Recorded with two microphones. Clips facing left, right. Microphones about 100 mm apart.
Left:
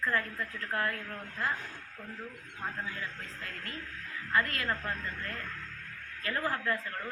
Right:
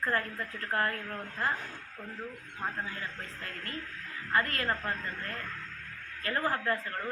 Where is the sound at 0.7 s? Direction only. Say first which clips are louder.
Right 2 dB; 45° right (ahead or behind).